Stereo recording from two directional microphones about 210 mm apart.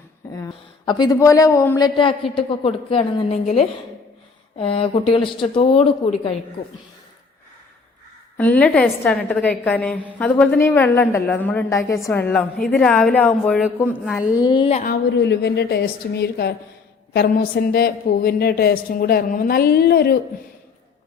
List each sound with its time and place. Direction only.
0.3 s a woman's voice: 20° left (ahead or behind)
8.4 s a woman's voice: 5° left (ahead or behind)
14.3 s a woman's voice: 20° left (ahead or behind)
15.2 s a woman's voice: 55° left (ahead or behind)